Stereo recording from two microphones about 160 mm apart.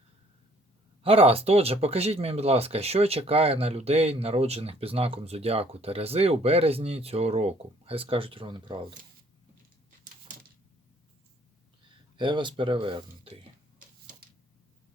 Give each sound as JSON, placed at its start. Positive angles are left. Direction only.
{"t": 1.0, "sound": "speech", "side_deg": -35}
{"t": 12.1, "sound": "speech", "side_deg": -30}